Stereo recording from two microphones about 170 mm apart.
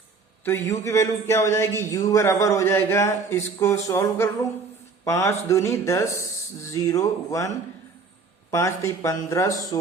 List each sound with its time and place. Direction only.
0.4 s a man's voice: 15° left (ahead or behind)